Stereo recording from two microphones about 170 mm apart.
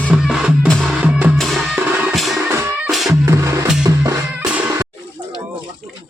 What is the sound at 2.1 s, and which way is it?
Music, centre (ahead or behind).